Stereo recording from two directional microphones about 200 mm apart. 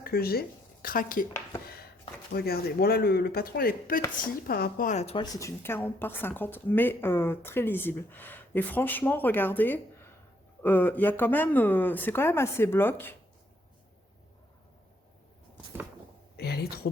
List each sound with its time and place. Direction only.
0.0 s speech: 50° left (ahead or behind)
2.3 s a woman's voice: 50° left (ahead or behind); by 13.1 s 10° left (ahead or behind)
16.4 s a sound: 50° left (ahead or behind)